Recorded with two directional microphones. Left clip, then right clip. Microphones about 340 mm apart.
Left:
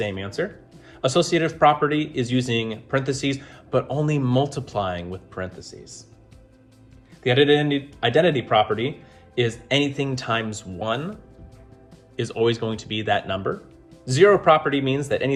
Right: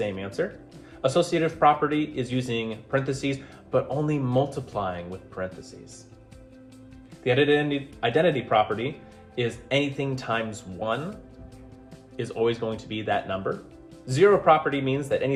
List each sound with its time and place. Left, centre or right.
0.0 s speech: left
7.3 s speech: left
12.1 s speech: left